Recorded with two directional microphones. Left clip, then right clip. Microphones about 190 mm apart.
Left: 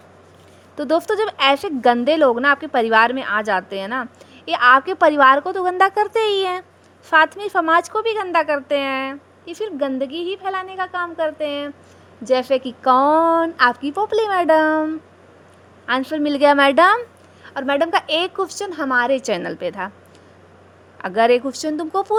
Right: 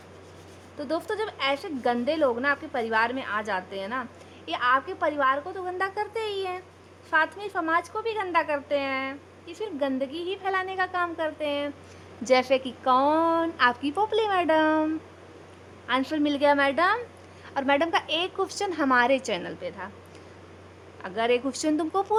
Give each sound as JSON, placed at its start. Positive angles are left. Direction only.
{"t": 0.8, "sound": "a woman's voice", "side_deg": 35}
{"t": 15.9, "sound": "a woman's voice", "side_deg": 20}
{"t": 17.4, "sound": "a woman's voice", "side_deg": 15}
{"t": 19.3, "sound": "a woman's voice", "side_deg": 30}
{"t": 21.0, "sound": "a woman's voice", "side_deg": 30}
{"t": 21.4, "sound": "a woman's voice", "side_deg": 15}